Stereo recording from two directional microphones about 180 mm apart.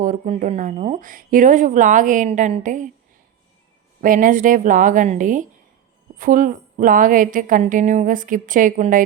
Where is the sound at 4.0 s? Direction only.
45° right (ahead or behind).